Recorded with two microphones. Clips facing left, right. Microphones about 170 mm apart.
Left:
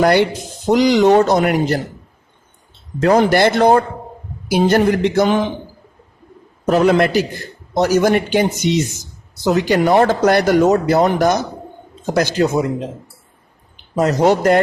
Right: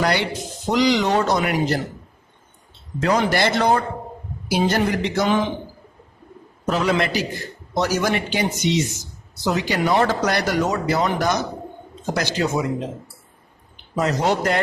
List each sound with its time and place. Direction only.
0.0 s speech: 50° left (ahead or behind)
3.0 s speech: 50° left (ahead or behind)
6.7 s speech: 50° left (ahead or behind)
13.9 s speech: 40° left (ahead or behind)